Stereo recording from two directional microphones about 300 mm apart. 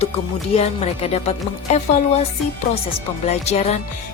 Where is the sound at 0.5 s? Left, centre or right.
Centre.